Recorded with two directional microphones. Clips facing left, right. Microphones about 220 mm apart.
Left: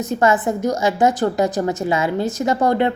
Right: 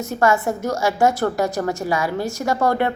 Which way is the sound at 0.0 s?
20° left (ahead or behind).